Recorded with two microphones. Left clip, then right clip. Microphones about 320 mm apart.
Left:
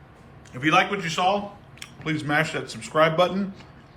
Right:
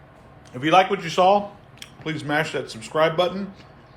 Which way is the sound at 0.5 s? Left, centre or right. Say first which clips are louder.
Right 3 dB; centre.